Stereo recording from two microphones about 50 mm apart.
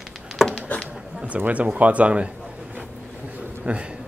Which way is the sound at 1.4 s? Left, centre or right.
Right.